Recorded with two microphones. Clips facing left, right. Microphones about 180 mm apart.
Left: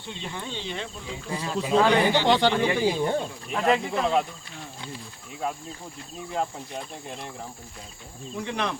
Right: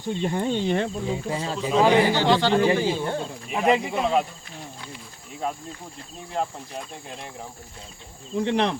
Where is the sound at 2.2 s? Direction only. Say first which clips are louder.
Right 2 dB; 15° left (ahead or behind).